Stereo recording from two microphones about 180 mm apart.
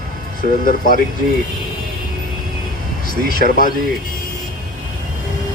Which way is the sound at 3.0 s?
50° left (ahead or behind).